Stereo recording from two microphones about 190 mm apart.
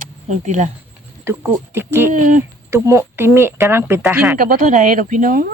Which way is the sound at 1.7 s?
10° right (ahead or behind).